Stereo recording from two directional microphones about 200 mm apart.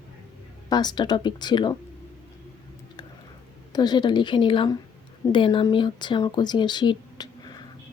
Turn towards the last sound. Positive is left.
turn(degrees=20)  # may be behind; listen again after turning